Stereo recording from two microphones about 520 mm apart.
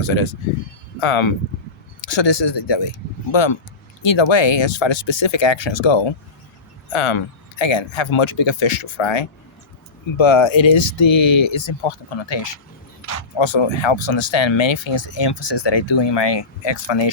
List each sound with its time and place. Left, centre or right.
0.9 s speech: left